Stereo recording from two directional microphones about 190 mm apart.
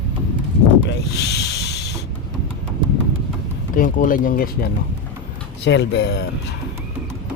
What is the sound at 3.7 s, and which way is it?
Speech, 45° left (ahead or behind).